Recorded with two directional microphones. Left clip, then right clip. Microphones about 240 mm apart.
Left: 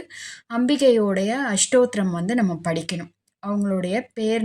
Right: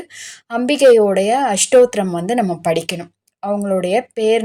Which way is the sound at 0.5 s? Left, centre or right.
Centre.